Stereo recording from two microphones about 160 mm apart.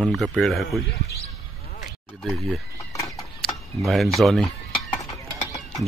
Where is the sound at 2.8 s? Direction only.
20° left (ahead or behind).